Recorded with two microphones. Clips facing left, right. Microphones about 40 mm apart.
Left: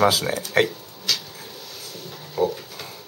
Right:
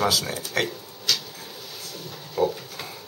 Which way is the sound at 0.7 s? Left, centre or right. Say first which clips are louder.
Even; centre.